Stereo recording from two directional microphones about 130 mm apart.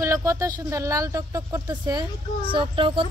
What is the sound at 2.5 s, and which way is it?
Speech, 40° right (ahead or behind).